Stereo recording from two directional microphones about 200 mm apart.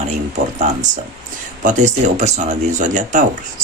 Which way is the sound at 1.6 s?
35° right (ahead or behind).